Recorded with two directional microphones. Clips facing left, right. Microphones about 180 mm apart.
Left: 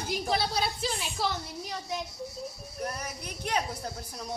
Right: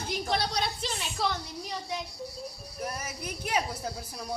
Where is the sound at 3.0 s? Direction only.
5° right (ahead or behind).